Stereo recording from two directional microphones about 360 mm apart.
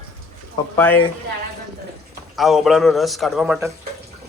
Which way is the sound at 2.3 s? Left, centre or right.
Centre.